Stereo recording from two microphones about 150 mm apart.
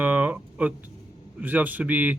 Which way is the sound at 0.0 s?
10° right (ahead or behind).